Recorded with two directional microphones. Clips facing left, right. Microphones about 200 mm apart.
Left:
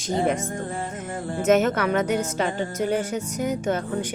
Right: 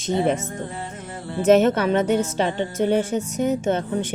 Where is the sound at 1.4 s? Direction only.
30° right (ahead or behind).